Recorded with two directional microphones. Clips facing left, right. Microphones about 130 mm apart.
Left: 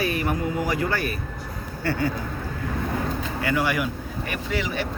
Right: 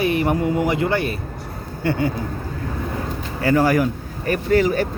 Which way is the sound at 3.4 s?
40° right (ahead or behind).